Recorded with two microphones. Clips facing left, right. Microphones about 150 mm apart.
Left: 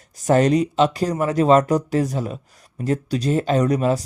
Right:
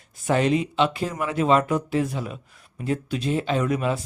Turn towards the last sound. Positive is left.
turn(degrees=40)  # may be behind; listen again after turning